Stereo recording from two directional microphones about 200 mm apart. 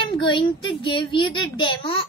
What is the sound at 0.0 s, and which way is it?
A child's voice, 25° left (ahead or behind).